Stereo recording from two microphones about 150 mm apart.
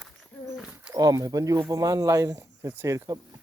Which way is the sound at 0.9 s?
25° right (ahead or behind).